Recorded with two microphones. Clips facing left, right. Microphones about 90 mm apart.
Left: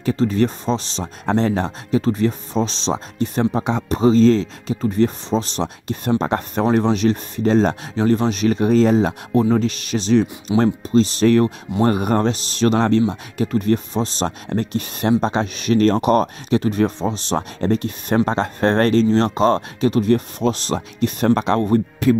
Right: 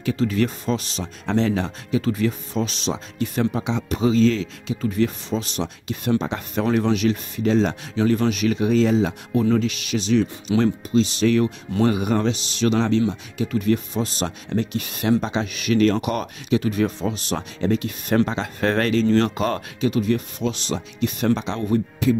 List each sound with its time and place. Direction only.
0.0 s speech: 35° left (ahead or behind)
6.6 s speech: 30° left (ahead or behind)
19.8 s speech: 40° left (ahead or behind)